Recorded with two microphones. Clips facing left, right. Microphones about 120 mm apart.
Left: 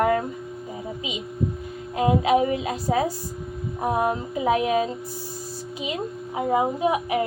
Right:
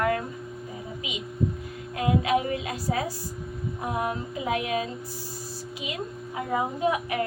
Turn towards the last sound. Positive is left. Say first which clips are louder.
# left 3 dB
turn(degrees=20)  # may be behind; listen again after turning